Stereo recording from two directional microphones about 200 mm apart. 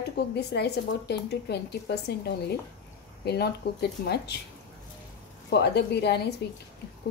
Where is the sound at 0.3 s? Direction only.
55° left (ahead or behind).